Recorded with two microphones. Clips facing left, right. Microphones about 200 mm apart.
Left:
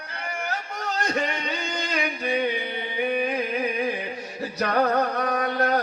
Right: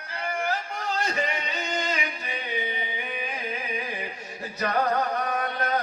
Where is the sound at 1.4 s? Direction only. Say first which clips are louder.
Even; 70° left (ahead or behind).